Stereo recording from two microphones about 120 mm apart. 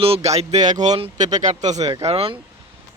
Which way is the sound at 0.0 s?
60° right (ahead or behind).